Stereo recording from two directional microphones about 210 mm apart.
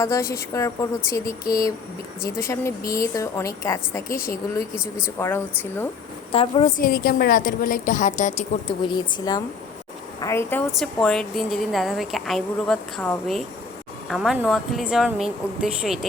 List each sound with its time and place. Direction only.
0.0 s speech: 15° left (ahead or behind)
4.7 s a woman's voice: 5° right (ahead or behind)
5.2 s speech: 10° left (ahead or behind)
6.3 s a woman's voice: 25° left (ahead or behind)
6.7 s a woman's voice: 45° left (ahead or behind)
8.6 s a woman's voice: 20° left (ahead or behind)
10.8 s a woman's voice: centre (ahead or behind)